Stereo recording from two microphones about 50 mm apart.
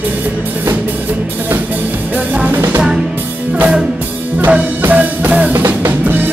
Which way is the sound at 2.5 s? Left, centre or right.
Right.